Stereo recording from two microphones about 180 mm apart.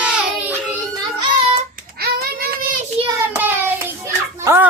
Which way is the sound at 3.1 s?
15° right (ahead or behind).